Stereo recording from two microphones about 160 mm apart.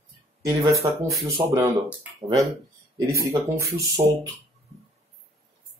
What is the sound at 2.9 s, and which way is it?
Speech, 20° right (ahead or behind).